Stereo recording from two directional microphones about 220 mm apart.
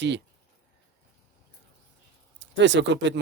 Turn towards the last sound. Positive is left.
turn(degrees=-55)  # may be behind; listen again after turning